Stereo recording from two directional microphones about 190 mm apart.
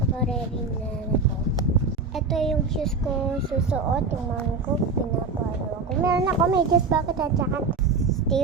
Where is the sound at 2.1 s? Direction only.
Centre (ahead or behind).